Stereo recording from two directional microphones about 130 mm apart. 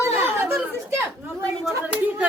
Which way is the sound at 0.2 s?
20° right (ahead or behind).